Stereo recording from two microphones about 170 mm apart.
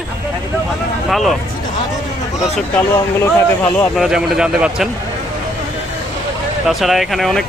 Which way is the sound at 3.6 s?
10° left (ahead or behind).